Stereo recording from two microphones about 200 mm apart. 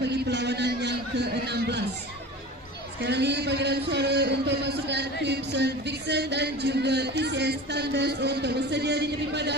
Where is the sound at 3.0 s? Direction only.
55° right (ahead or behind).